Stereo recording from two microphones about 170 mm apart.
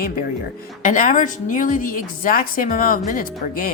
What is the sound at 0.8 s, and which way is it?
Speech, 50° left (ahead or behind).